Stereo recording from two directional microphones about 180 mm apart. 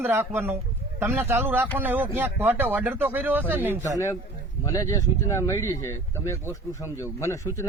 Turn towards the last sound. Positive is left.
turn(degrees=15)  # may be behind; listen again after turning